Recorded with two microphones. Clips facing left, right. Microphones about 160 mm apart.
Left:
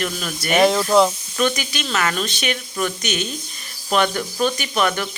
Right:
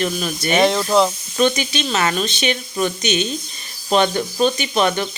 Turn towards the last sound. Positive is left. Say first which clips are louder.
# right 3 dB
turn(degrees=-25)  # may be behind; listen again after turning